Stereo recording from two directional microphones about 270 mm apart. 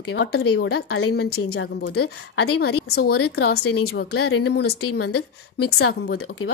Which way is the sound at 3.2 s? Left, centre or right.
Left.